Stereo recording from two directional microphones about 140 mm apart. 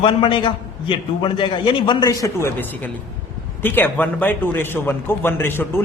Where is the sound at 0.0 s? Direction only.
35° left (ahead or behind).